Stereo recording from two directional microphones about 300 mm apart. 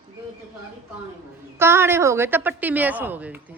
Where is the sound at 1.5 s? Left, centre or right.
Centre.